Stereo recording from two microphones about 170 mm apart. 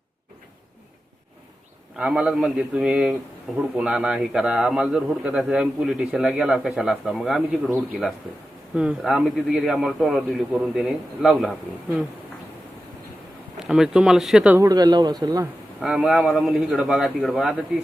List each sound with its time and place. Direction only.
2.0 s a man's voice: 5° right (ahead or behind)
13.6 s a man's voice: 5° right (ahead or behind)
14.6 s speech: 25° right (ahead or behind)
15.8 s a man's voice: 5° right (ahead or behind)